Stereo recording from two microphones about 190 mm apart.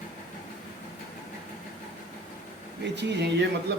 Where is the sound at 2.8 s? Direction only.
65° right (ahead or behind).